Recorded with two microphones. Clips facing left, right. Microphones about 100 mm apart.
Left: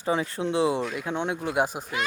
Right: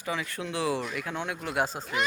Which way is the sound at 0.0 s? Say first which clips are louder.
Left 7 dB; 30° left (ahead or behind).